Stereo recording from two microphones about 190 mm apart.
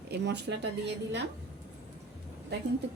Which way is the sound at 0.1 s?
65° right (ahead or behind).